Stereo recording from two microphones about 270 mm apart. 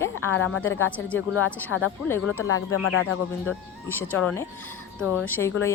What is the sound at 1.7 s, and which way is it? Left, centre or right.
Speech, left.